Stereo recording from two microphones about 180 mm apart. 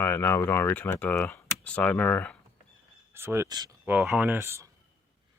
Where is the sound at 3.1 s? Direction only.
15° right (ahead or behind).